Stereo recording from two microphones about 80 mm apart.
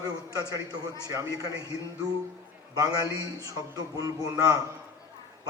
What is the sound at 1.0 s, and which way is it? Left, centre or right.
Speech, right.